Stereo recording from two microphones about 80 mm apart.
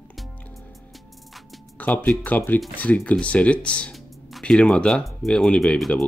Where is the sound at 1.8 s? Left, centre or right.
Left.